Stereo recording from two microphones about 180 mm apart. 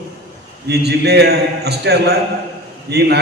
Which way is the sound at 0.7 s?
65° right (ahead or behind).